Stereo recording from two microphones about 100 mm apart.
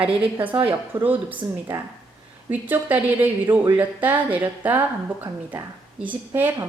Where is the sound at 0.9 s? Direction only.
20° right (ahead or behind).